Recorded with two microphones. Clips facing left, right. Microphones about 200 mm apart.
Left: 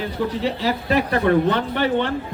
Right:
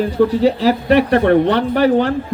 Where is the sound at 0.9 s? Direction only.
75° right (ahead or behind).